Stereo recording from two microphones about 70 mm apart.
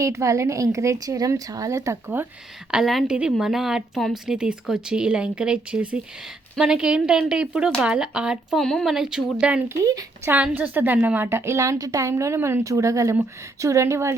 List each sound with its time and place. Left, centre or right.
0.0 s a woman's voice: right
2.7 s speech: centre
8.5 s speech: centre
8.9 s speech: centre
10.5 s a woman's voice: right